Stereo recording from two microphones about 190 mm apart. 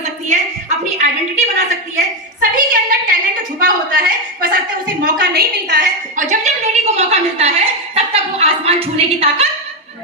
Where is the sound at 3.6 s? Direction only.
50° right (ahead or behind).